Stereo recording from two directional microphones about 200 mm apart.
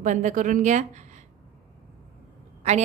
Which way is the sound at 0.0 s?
40° right (ahead or behind).